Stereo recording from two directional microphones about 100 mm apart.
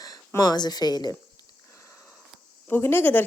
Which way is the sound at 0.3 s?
45° left (ahead or behind).